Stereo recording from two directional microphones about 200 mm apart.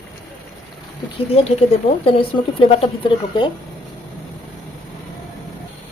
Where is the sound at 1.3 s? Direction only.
30° left (ahead or behind).